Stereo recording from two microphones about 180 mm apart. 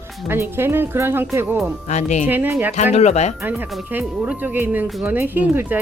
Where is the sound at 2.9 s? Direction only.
35° left (ahead or behind).